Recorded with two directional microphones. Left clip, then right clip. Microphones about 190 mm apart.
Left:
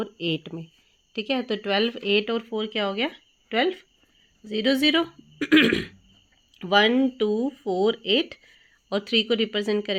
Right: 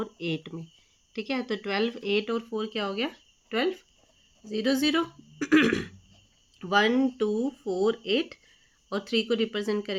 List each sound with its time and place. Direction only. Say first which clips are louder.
0.0 s speech: left 4 dB; 30° left (ahead or behind)